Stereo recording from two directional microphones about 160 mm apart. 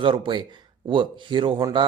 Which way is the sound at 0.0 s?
30° right (ahead or behind).